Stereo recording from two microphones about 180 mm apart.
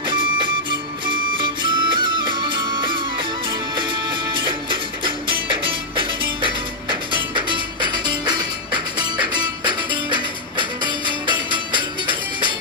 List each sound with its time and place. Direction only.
0.0 s music: 25° right (ahead or behind)
9.6 s music: 25° right (ahead or behind)